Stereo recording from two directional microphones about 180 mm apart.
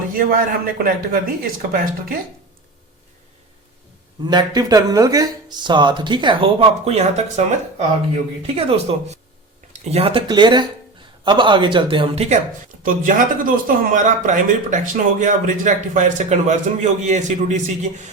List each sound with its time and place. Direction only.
0.2 s speech: 50° right (ahead or behind)
4.3 s speech: 20° right (ahead or behind)
12.6 s speech: 50° right (ahead or behind)